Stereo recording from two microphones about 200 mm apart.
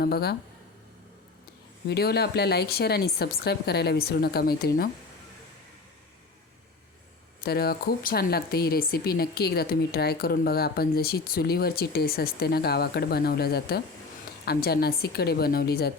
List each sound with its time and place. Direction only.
0.0 s speech: 50° left (ahead or behind)
1.9 s speech: 55° left (ahead or behind)
7.4 s speech: 50° left (ahead or behind)